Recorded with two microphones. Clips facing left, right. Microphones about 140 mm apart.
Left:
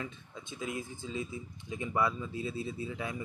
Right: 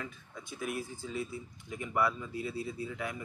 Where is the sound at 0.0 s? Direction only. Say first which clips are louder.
Left 2 dB; 20° left (ahead or behind).